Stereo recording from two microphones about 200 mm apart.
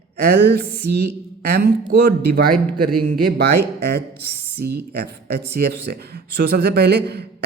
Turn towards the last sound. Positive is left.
turn(degrees=-55)  # may be behind; listen again after turning